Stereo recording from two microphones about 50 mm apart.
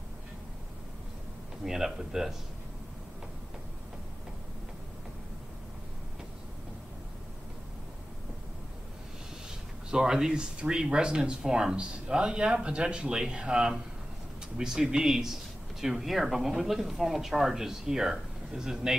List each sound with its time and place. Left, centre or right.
1.6 s speech: centre
9.8 s speech: centre